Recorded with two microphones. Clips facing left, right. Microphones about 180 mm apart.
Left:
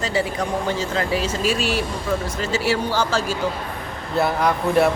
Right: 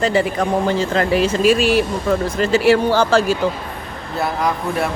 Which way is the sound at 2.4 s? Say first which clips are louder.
Right 11 dB; 60° right (ahead or behind).